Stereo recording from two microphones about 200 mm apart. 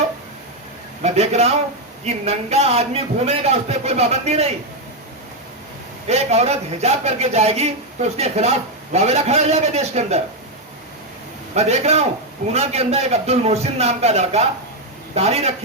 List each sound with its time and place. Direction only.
1.0 s a man's voice: 35° right (ahead or behind)
6.1 s a man's voice: 35° right (ahead or behind)
11.5 s a man's voice: 30° right (ahead or behind)